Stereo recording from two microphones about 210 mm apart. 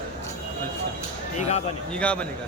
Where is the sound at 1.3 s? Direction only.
30° left (ahead or behind).